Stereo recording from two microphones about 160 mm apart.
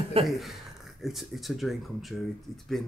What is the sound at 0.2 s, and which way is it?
Speech, centre (ahead or behind).